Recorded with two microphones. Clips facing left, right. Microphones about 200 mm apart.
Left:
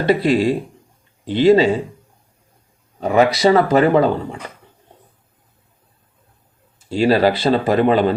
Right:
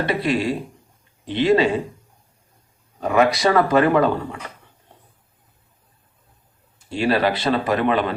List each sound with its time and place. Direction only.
0.0 s speech: 35° left (ahead or behind)
3.0 s speech: 30° left (ahead or behind)
6.9 s speech: 35° left (ahead or behind)